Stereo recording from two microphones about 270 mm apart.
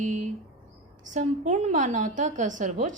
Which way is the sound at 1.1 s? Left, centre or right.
Right.